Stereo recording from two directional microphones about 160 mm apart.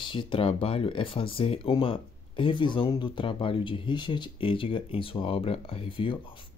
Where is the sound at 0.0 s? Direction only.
30° left (ahead or behind).